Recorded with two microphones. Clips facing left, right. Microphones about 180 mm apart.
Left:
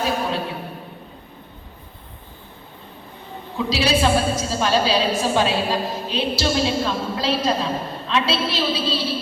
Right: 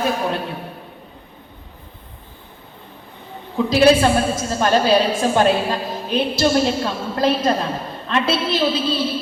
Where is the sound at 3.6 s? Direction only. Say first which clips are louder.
Right 6 dB; 50° right (ahead or behind).